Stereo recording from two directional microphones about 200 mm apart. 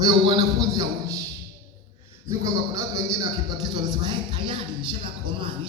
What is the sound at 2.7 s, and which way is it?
Speech, 15° right (ahead or behind).